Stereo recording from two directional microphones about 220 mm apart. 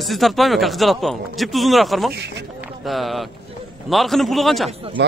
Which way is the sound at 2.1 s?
50° right (ahead or behind).